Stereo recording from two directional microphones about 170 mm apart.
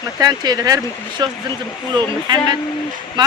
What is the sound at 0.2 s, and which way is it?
Speech, 25° right (ahead or behind).